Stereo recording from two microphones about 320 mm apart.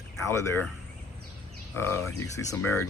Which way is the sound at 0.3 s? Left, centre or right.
Centre.